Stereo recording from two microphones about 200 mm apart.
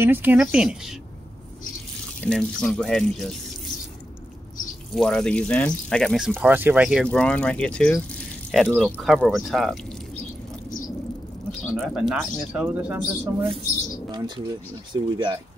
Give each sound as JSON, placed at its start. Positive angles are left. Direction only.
{"t": 0.0, "sound": "speech", "side_deg": -10}
{"t": 2.2, "sound": "speech", "side_deg": 5}
{"t": 4.9, "sound": "speech", "side_deg": 0}
{"t": 11.7, "sound": "speech", "side_deg": 0}
{"t": 14.1, "sound": "speech", "side_deg": -20}